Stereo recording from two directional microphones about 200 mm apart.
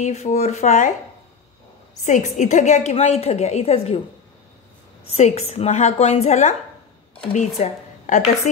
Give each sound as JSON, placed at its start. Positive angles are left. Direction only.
{"t": 0.0, "sound": "a woman's voice", "side_deg": 35}
{"t": 2.0, "sound": "a woman's voice", "side_deg": 35}
{"t": 5.0, "sound": "a woman's voice", "side_deg": 30}